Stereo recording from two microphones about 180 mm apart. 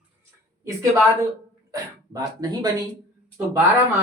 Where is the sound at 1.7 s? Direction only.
20° right (ahead or behind).